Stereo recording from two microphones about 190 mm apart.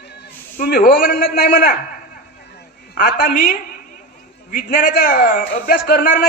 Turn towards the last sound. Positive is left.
turn(degrees=50)  # may be behind; listen again after turning